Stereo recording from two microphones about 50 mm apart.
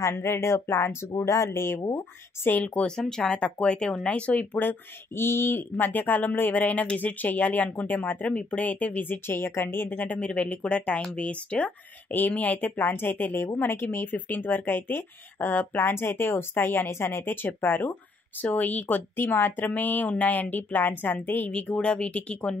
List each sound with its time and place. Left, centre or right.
0.0 s speech: left
2.4 s speech: left
3.0 s speech: centre
4.6 s speech: left
5.9 s speech: left
8.3 s speech: left
9.8 s speech: left
12.1 s speech: left
12.8 s speech: left
18.4 s speech: left
19.1 s speech: left
21.5 s speech: left